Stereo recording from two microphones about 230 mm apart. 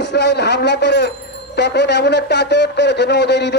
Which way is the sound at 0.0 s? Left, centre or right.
Left.